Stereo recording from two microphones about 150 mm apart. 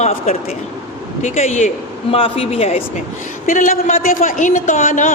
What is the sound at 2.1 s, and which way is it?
Speech, 40° left (ahead or behind).